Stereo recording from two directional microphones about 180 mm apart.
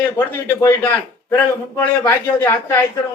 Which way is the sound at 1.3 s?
15° left (ahead or behind).